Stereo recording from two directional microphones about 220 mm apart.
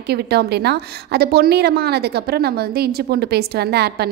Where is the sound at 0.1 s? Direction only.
50° right (ahead or behind).